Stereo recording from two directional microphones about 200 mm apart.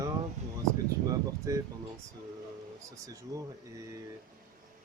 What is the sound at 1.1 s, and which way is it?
Speech, 15° right (ahead or behind).